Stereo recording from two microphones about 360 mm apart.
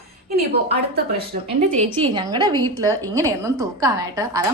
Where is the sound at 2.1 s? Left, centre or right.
Centre.